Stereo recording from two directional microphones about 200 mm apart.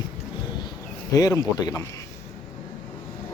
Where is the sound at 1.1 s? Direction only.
15° left (ahead or behind).